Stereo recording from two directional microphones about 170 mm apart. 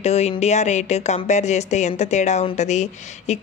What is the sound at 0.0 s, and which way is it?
Speech, 40° left (ahead or behind).